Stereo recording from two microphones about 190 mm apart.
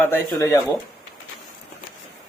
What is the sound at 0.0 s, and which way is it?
Speech, 15° left (ahead or behind).